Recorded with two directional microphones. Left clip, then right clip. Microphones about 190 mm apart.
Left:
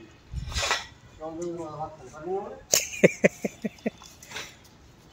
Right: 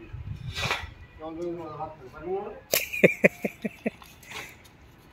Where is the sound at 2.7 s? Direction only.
5° left (ahead or behind).